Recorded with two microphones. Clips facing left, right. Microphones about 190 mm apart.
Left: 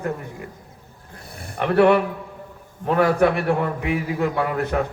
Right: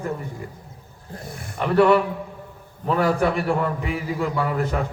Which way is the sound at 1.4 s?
60° left (ahead or behind).